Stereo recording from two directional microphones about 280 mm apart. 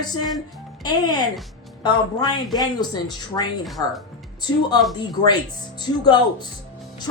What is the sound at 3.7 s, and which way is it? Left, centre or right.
Speech, centre.